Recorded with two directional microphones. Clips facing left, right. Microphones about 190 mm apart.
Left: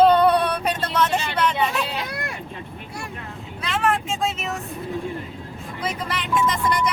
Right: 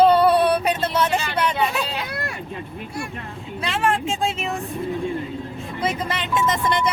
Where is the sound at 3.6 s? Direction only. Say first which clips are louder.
Right 1 dB; 30° right (ahead or behind).